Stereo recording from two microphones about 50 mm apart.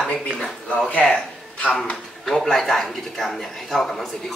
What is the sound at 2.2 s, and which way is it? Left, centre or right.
A man's voice, centre.